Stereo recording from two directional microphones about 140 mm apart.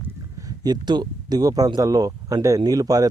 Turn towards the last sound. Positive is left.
turn(degrees=-25)  # may be behind; listen again after turning